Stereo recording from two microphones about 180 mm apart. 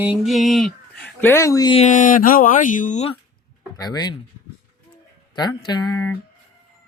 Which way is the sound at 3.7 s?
20° left (ahead or behind).